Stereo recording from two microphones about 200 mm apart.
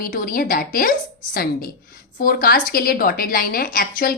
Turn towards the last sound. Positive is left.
turn(degrees=45)  # may be behind; listen again after turning